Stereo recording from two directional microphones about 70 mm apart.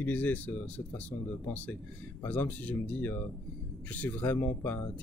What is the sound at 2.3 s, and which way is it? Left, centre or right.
Speech, left.